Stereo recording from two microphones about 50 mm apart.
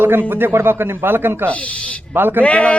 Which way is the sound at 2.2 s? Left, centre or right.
Right.